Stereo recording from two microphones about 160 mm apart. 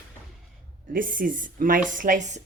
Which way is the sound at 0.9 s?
60° right (ahead or behind).